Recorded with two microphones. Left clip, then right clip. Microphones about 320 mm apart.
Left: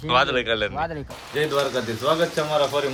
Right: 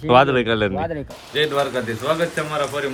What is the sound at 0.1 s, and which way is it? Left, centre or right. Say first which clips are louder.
Speech: right 6 dB; centre.